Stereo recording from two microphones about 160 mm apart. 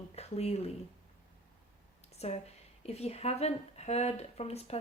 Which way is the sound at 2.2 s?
45° left (ahead or behind).